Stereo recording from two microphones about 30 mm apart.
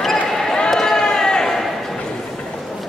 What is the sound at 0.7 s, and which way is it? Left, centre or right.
Run, centre.